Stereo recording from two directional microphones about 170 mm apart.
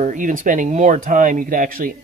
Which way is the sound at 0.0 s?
50° right (ahead or behind).